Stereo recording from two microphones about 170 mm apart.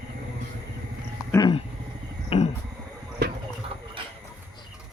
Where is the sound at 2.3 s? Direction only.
35° left (ahead or behind).